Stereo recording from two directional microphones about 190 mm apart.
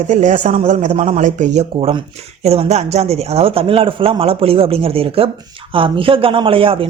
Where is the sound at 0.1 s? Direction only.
40° right (ahead or behind).